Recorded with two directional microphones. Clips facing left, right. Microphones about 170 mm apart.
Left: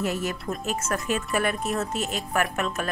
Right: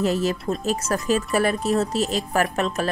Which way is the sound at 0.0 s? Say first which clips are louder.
Right 6 dB; 35° right (ahead or behind).